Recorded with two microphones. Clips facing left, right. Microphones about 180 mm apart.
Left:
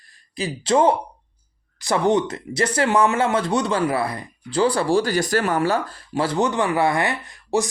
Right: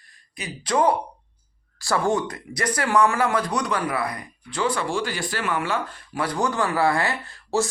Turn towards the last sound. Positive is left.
turn(degrees=15)  # may be behind; listen again after turning